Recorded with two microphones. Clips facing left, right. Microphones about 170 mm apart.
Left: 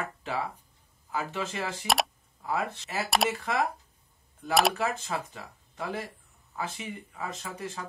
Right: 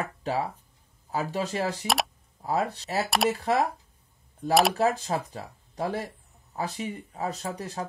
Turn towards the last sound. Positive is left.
turn(degrees=-35)  # may be behind; listen again after turning